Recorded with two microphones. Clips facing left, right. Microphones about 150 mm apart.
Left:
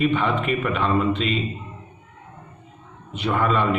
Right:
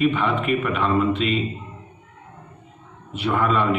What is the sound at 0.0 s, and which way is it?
A man's voice, 5° right (ahead or behind).